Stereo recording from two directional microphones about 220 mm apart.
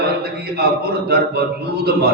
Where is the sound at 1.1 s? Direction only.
45° right (ahead or behind).